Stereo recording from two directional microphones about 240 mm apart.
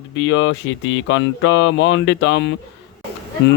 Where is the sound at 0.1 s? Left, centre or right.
Left.